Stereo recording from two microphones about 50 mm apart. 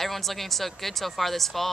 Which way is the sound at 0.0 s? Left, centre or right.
Centre.